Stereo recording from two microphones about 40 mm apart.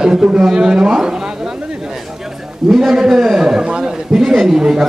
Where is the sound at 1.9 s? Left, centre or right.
Centre.